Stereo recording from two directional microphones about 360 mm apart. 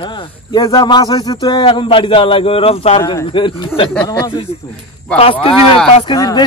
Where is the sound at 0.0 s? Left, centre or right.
Centre.